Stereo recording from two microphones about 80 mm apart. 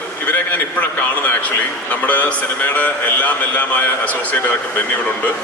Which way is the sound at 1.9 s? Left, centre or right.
Left.